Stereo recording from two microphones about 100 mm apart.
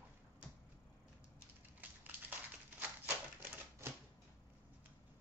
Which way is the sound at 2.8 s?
20° right (ahead or behind).